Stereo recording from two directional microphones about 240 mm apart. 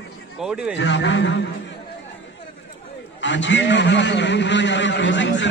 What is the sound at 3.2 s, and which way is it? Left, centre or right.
A man's voice, left.